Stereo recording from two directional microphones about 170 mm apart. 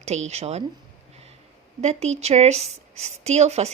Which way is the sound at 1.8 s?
40° right (ahead or behind).